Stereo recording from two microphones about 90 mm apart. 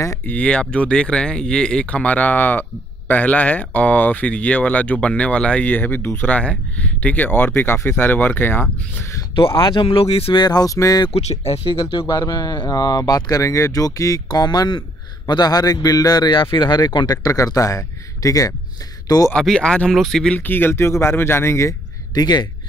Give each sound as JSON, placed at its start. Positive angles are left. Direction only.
{"t": 0.3, "sound": "speech", "side_deg": 15}
{"t": 9.3, "sound": "speech", "side_deg": 75}
{"t": 10.4, "sound": "speech", "side_deg": 45}
{"t": 12.1, "sound": "speech", "side_deg": 45}
{"t": 19.3, "sound": "speech", "side_deg": 5}
{"t": 20.3, "sound": "speech", "side_deg": 20}
{"t": 22.1, "sound": "speech", "side_deg": 55}